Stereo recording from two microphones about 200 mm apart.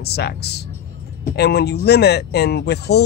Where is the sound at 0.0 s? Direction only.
55° left (ahead or behind).